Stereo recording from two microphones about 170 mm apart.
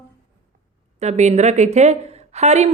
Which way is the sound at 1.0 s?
40° right (ahead or behind).